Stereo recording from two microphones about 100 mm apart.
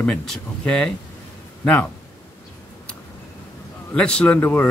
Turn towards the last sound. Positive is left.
turn(degrees=15)  # may be behind; listen again after turning